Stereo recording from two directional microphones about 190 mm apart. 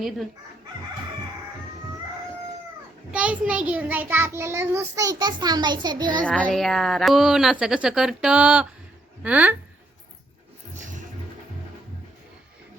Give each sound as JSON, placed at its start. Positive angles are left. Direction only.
{"t": 3.1, "sound": "a child's voice", "side_deg": -5}
{"t": 6.2, "sound": "a woman's voice", "side_deg": 5}
{"t": 10.8, "sound": "a sound", "side_deg": -40}